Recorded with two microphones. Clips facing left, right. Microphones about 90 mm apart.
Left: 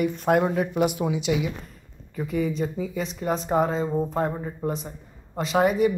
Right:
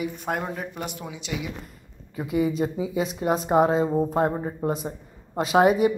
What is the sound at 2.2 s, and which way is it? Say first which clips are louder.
A woman's voice: right 2 dB; 15° right (ahead or behind).